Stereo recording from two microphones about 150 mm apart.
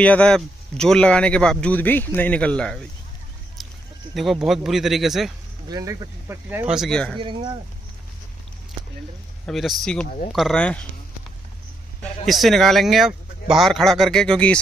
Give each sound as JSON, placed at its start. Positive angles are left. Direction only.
{"t": 0.0, "sound": "speech", "side_deg": 10}
{"t": 4.1, "sound": "speech", "side_deg": 0}
{"t": 5.7, "sound": "speech", "side_deg": -25}
{"t": 6.7, "sound": "speech", "side_deg": 0}
{"t": 7.2, "sound": "speech", "side_deg": -35}
{"t": 9.5, "sound": "speech", "side_deg": 0}
{"t": 12.3, "sound": "speech", "side_deg": 0}